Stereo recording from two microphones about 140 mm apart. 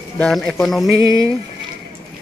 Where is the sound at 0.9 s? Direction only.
25° right (ahead or behind).